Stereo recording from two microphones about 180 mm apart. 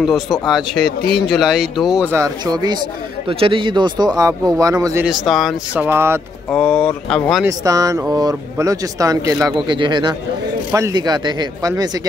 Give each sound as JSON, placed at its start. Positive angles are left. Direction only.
{"t": 0.0, "sound": "speech", "side_deg": 0}
{"t": 5.0, "sound": "speech", "side_deg": 0}
{"t": 5.9, "sound": "speech", "side_deg": -15}
{"t": 6.5, "sound": "speech", "side_deg": 5}
{"t": 7.4, "sound": "speech", "side_deg": -20}